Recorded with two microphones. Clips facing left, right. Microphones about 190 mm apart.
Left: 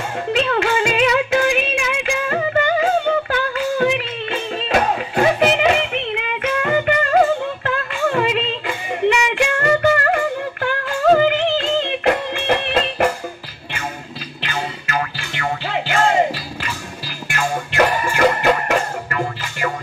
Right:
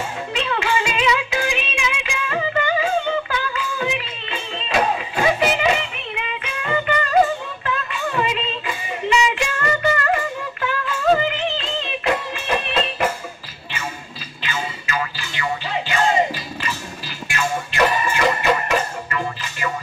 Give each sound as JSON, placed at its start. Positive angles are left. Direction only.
{"t": 0.3, "sound": "music", "side_deg": 55}
{"t": 14.4, "sound": "music", "side_deg": 55}